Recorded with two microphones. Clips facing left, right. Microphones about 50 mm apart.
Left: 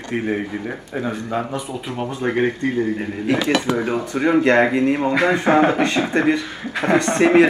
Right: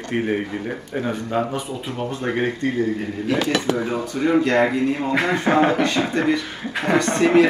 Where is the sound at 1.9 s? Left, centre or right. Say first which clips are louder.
Left 3 dB; centre.